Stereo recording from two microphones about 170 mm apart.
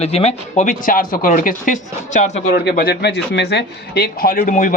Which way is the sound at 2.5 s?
65° left (ahead or behind).